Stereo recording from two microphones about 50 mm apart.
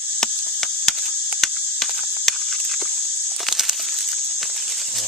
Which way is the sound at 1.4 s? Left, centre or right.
Centre.